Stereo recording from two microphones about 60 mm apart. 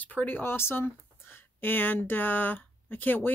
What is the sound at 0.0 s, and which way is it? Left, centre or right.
Speech, left.